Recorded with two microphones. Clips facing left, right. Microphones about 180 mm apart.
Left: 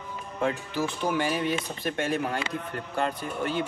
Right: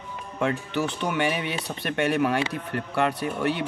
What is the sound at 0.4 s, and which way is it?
Speech, 70° right (ahead or behind).